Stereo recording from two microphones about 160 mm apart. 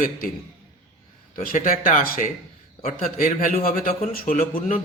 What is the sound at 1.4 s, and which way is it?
A man's voice, 60° left (ahead or behind).